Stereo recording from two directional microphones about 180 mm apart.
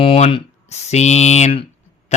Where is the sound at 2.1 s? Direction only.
40° left (ahead or behind).